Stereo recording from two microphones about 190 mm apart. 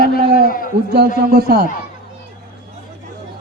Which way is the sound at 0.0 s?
50° left (ahead or behind).